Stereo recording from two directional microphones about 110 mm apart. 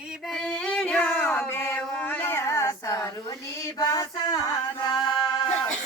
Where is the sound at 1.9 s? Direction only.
15° left (ahead or behind); by 4.4 s 35° left (ahead or behind).